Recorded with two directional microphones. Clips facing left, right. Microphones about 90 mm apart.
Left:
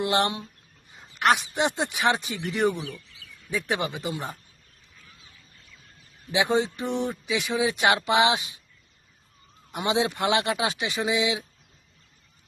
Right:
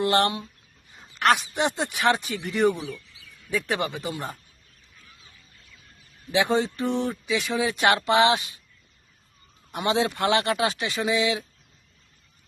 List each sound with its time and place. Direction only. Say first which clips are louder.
0.0 s speech: right 2 dB; 20° left (ahead or behind)
6.3 s speech: right 1 dB; 15° left (ahead or behind)
9.7 s speech: right 1 dB; 15° left (ahead or behind)